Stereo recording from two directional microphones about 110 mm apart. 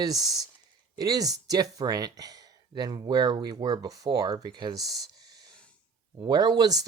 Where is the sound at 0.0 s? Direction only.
35° right (ahead or behind).